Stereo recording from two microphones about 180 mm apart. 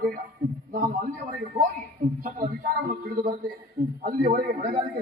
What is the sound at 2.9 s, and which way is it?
A man's voice, 50° right (ahead or behind).